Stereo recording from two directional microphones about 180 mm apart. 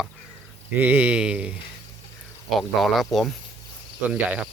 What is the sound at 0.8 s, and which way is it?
Speech, 10° right (ahead or behind).